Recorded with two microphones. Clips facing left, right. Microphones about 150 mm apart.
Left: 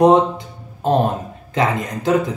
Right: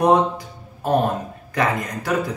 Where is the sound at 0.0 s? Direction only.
20° left (ahead or behind).